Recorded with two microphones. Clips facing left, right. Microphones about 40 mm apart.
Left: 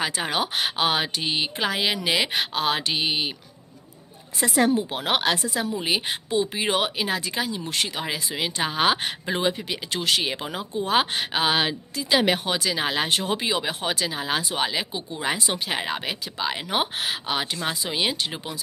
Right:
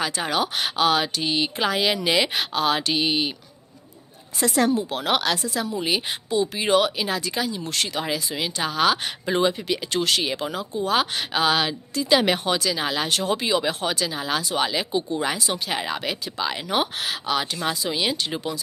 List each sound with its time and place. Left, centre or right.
0.0 s speech: centre
1.5 s speech: centre
4.4 s speech: centre
9.3 s speech: centre
10.5 s speech: left
12.0 s speech: centre
12.5 s speech: left